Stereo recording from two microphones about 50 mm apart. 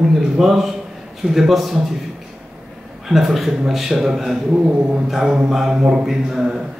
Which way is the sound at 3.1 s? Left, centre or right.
Centre.